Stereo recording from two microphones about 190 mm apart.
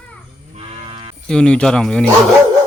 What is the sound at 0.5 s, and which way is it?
Moo, 30° right (ahead or behind).